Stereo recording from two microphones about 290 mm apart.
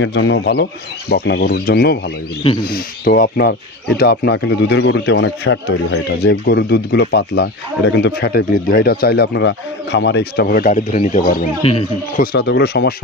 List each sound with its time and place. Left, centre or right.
0.0 s speech: left